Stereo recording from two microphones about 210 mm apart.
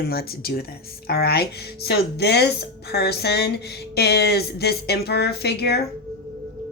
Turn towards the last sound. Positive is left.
turn(degrees=50)  # may be behind; listen again after turning